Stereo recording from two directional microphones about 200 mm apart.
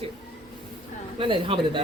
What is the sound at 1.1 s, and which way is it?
Speech, 25° right (ahead or behind).